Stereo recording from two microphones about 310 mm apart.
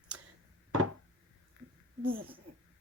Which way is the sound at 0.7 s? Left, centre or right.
Right.